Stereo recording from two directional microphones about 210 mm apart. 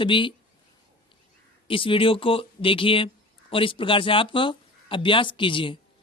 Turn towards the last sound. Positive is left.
turn(degrees=25)  # may be behind; listen again after turning